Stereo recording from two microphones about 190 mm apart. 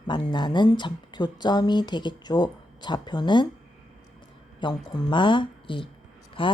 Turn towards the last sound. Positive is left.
turn(degrees=25)  # may be behind; listen again after turning